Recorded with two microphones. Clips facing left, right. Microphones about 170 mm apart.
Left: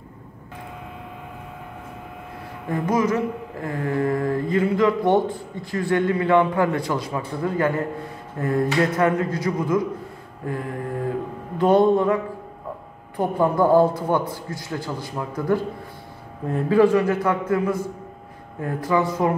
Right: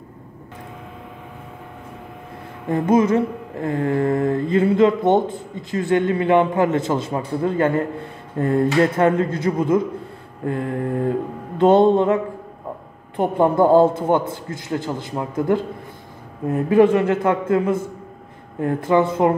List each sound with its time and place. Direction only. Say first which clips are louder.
2.7 s mantra: right 5 dB; 25° right (ahead or behind)
16.6 s mantra: right 2 dB; 20° right (ahead or behind)
18.9 s mantra: right 4 dB; 25° right (ahead or behind)